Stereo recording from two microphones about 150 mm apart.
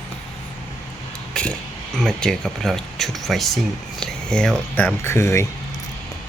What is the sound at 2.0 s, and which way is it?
Speech, 5° left (ahead or behind).